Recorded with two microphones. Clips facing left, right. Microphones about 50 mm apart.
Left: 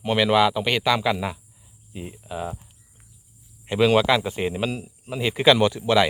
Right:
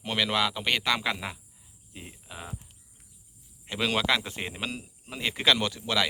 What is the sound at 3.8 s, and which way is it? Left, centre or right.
Speech, centre.